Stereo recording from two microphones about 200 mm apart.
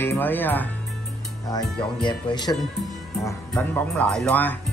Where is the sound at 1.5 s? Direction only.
25° left (ahead or behind).